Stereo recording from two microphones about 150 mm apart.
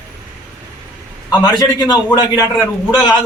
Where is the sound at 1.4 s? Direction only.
25° left (ahead or behind).